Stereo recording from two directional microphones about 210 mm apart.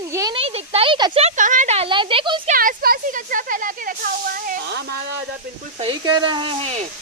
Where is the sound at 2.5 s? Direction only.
45° right (ahead or behind).